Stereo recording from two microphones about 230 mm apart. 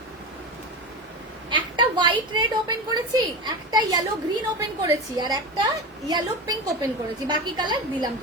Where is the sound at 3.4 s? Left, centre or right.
Centre.